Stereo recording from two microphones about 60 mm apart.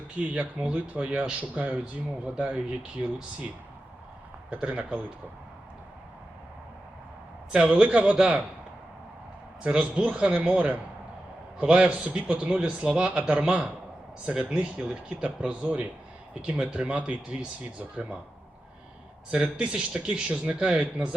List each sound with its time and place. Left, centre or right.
0.2 s speech: centre
4.4 s speech: right
7.5 s speech: right
9.6 s a man's voice: centre
19.3 s a man's voice: centre